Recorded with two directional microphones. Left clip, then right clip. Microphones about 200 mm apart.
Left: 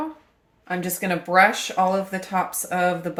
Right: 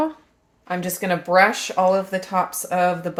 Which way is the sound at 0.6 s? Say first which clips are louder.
Right 2 dB; 25° right (ahead or behind).